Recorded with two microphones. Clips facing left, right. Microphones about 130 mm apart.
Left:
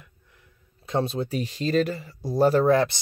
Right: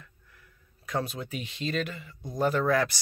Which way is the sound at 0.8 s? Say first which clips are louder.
Left 6 dB; 25° left (ahead or behind).